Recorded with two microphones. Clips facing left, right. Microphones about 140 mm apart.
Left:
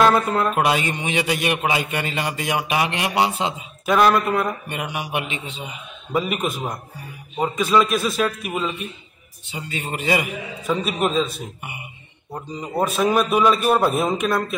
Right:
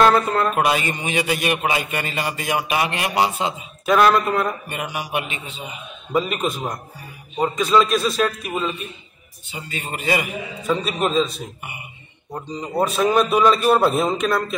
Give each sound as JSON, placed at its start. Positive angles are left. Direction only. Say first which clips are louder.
{"t": 0.0, "sound": "speech", "louder": "right 1 dB", "side_deg": 5}
{"t": 0.5, "sound": "a man's voice", "louder": "even", "side_deg": 20}
{"t": 3.9, "sound": "a man's voice", "louder": "right 1 dB", "side_deg": 0}
{"t": 4.6, "sound": "speech", "louder": "even", "side_deg": 15}
{"t": 6.1, "sound": "a man's voice", "louder": "right 1 dB", "side_deg": 5}
{"t": 12.7, "sound": "a man's voice", "louder": "right 1 dB", "side_deg": 0}